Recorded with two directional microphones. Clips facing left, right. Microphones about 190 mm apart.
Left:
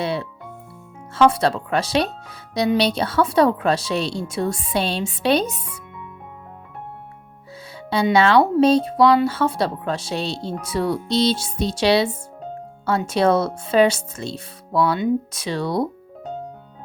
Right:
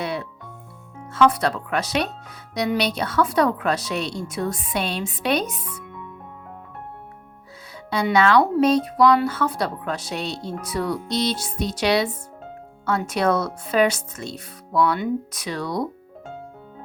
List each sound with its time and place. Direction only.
0.0 s music: 30° left (ahead or behind)
1.1 s speech: 30° left (ahead or behind)
7.9 s speech: 30° left (ahead or behind)